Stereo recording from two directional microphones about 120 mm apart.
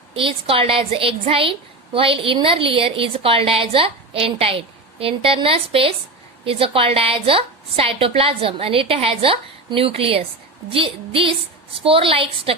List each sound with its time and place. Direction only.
0.1 s a woman's voice: 50° right (ahead or behind)